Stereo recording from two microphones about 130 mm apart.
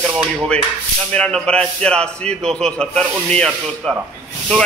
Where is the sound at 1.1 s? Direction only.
10° left (ahead or behind).